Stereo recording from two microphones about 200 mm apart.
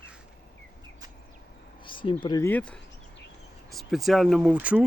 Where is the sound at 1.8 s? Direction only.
25° left (ahead or behind).